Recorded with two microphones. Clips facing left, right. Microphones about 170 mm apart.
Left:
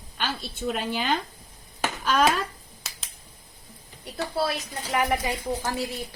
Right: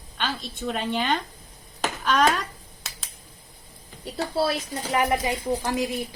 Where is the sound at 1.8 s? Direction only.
Centre (ahead or behind).